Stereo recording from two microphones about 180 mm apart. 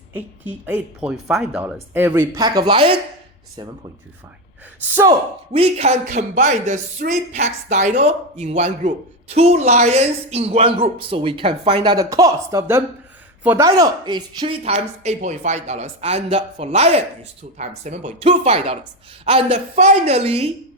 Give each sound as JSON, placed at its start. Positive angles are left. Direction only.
{"t": 0.1, "sound": "speech", "side_deg": -10}
{"t": 5.5, "sound": "speech", "side_deg": -35}
{"t": 14.6, "sound": "speech", "side_deg": -35}